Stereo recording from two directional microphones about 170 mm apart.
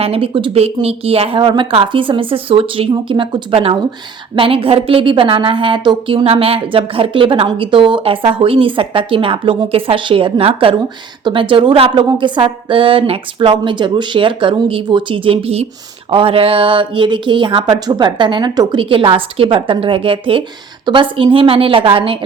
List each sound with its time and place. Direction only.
0.0 s a woman's voice: 35° right (ahead or behind)